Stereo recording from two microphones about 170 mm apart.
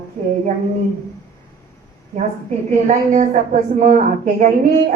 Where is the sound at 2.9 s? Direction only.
50° right (ahead or behind).